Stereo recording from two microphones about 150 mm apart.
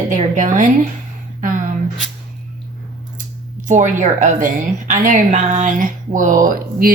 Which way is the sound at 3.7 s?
55° right (ahead or behind).